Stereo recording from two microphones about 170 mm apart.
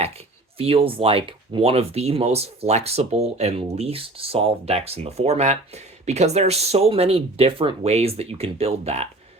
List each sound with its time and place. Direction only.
0.6 s speech: 35° right (ahead or behind)